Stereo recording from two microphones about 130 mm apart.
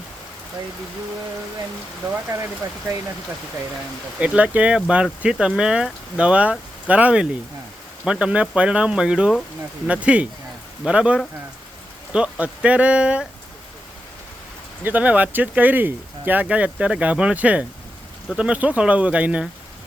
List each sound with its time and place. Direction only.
4.2 s speech: 10° right (ahead or behind)
14.8 s speech: 10° right (ahead or behind)